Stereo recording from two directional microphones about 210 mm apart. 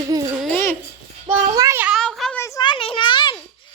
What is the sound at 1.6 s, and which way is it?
Child singing, 10° right (ahead or behind).